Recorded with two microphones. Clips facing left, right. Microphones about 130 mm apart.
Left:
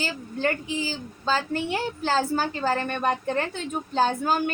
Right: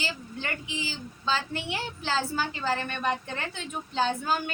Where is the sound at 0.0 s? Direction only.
45° left (ahead or behind).